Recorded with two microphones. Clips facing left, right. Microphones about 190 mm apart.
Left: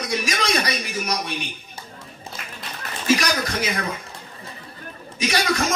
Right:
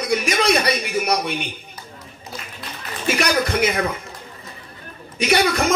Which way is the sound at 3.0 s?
60° right (ahead or behind).